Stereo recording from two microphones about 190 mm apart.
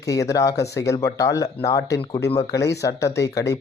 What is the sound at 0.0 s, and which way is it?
Speech, 15° left (ahead or behind).